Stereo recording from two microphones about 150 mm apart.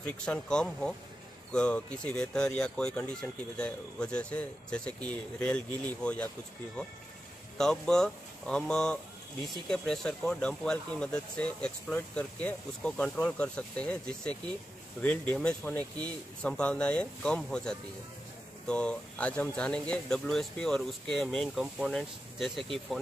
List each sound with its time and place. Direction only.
0.0 s speech: 10° left (ahead or behind)
7.5 s speech: 5° left (ahead or behind)